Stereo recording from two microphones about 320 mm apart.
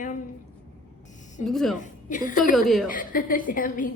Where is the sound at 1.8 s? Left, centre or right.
Left.